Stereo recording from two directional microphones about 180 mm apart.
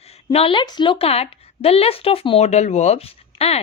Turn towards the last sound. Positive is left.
turn(degrees=35)  # may be behind; listen again after turning